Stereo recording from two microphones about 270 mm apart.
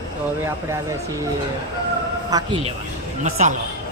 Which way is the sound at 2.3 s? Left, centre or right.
Centre.